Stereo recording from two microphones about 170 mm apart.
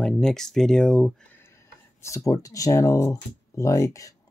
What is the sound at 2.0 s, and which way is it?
Speech, 20° left (ahead or behind).